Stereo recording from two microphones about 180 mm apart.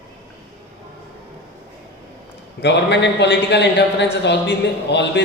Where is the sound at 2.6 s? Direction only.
75° left (ahead or behind).